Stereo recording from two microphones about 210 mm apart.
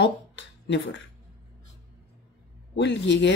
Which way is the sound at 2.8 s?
60° left (ahead or behind).